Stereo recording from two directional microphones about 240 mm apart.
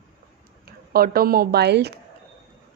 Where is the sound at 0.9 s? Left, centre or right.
Right.